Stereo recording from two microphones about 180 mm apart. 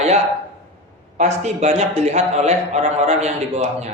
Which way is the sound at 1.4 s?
35° right (ahead or behind).